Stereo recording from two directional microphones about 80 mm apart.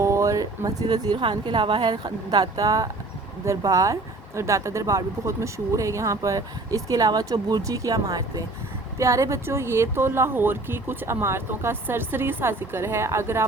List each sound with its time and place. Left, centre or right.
0.0 s speech: right
1.2 s speech: right